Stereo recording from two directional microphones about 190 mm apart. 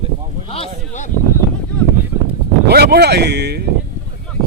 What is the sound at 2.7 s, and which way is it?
Speech, 55° right (ahead or behind).